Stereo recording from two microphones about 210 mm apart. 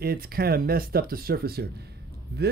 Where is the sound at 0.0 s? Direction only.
45° right (ahead or behind).